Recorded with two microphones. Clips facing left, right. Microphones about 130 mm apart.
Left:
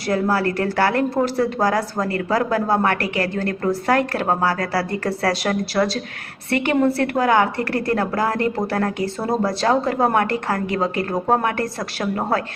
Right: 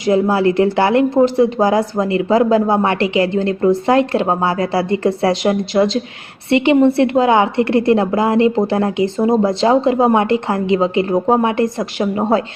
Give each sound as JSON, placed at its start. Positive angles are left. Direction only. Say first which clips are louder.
{"t": 0.0, "sound": "speech", "louder": "right 6 dB", "side_deg": -20}